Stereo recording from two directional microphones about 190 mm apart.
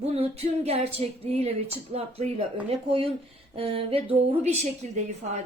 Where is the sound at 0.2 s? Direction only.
35° right (ahead or behind).